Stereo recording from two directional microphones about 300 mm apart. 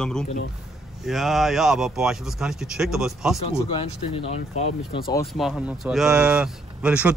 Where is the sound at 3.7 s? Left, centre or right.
Centre.